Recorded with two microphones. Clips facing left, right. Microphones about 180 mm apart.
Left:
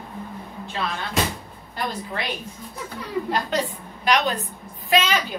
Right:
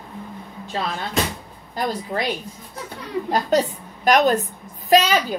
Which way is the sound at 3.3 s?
45° right (ahead or behind).